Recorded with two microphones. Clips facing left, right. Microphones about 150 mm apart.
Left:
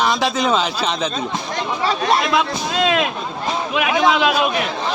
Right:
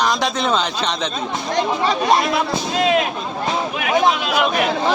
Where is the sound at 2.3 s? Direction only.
90° left.